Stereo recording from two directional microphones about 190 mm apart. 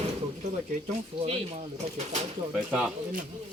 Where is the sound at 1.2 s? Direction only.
35° right (ahead or behind).